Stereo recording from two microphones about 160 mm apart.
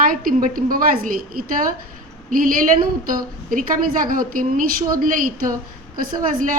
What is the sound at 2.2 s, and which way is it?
A woman's voice, 60° right (ahead or behind).